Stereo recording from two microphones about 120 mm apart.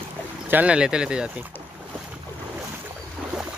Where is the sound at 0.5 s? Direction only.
10° right (ahead or behind).